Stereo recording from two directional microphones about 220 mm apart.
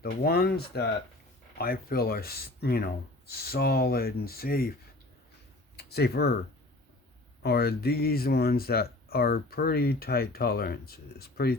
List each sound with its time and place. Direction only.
0.0 s speech: 45° left (ahead or behind)
5.7 s speech: 45° left (ahead or behind)
7.4 s speech: 45° left (ahead or behind)